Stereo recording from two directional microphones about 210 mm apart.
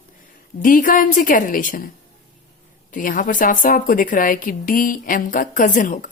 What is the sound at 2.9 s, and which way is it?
A woman's voice, 40° left (ahead or behind).